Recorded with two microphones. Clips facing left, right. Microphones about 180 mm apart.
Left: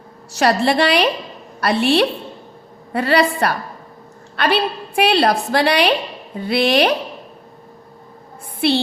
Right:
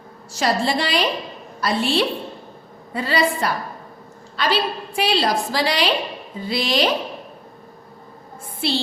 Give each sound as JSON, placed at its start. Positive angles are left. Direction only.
{"t": 0.3, "sound": "a woman's voice", "side_deg": 65}
{"t": 8.6, "sound": "a woman's voice", "side_deg": 65}